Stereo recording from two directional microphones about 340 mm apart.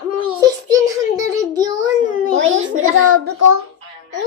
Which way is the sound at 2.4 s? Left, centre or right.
Right.